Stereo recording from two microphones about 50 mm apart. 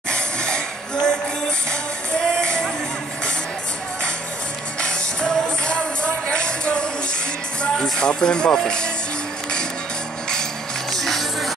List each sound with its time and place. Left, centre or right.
0.1 s a sound: centre
1.7 s music: centre
4.7 s music: centre
7.6 s speech: centre
10.9 s music: centre